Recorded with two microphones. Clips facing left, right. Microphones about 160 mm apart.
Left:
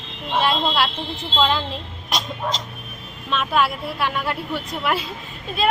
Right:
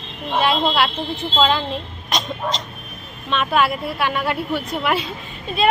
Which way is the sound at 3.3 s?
Centre (ahead or behind).